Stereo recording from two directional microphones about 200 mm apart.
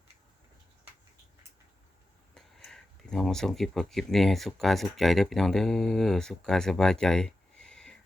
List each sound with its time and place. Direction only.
2.3 s speech: centre (ahead or behind)